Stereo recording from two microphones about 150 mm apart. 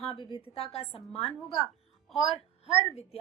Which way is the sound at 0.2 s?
35° left (ahead or behind).